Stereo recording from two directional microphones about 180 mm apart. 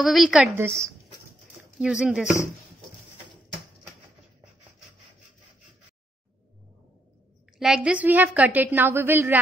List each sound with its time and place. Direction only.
0.0 s a woman's voice: centre (ahead or behind)
0.7 s a woman's voice: 15° right (ahead or behind)
1.8 s a woman's voice: 5° right (ahead or behind)
7.5 s a woman's voice: 5° right (ahead or behind)